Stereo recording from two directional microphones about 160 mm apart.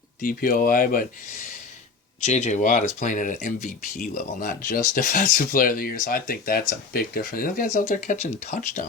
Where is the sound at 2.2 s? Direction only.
45° left (ahead or behind).